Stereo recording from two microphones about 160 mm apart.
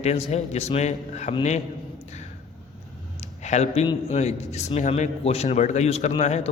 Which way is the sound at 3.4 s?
45° left (ahead or behind).